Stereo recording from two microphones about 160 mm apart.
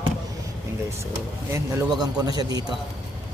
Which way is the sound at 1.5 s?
20° right (ahead or behind).